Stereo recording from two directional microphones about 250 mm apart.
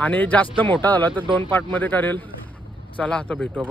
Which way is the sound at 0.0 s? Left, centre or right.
Centre.